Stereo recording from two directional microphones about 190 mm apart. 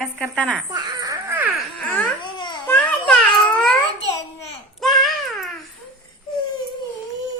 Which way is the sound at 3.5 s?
5° left (ahead or behind).